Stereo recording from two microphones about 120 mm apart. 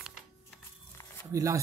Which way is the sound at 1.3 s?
25° right (ahead or behind).